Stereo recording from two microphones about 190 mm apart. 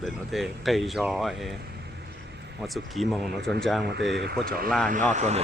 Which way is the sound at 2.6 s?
Centre (ahead or behind).